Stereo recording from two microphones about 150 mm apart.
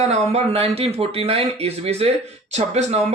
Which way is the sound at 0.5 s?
40° right (ahead or behind).